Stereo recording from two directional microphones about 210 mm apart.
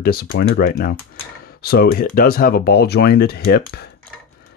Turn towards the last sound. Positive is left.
turn(degrees=50)  # may be behind; listen again after turning